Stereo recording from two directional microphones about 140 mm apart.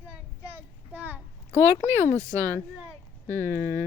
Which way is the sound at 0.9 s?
10° right (ahead or behind).